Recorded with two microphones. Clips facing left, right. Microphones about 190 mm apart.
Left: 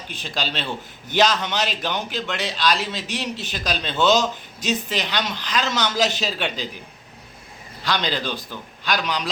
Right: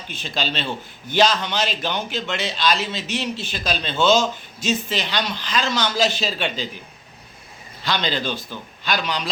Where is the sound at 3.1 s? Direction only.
15° left (ahead or behind).